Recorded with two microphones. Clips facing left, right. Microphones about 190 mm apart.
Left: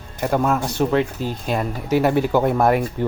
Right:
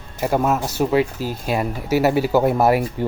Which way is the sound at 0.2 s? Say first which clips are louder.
Even; 5° right (ahead or behind).